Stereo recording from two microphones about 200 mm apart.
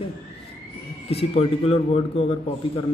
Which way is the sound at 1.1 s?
30° left (ahead or behind).